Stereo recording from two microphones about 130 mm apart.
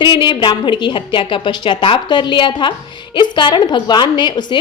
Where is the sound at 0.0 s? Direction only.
35° left (ahead or behind).